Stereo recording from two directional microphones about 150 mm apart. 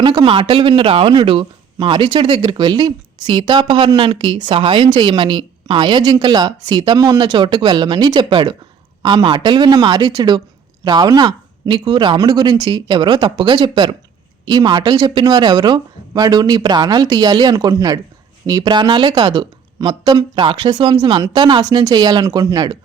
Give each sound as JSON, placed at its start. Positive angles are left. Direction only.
{"t": 0.0, "sound": "speech", "side_deg": -30}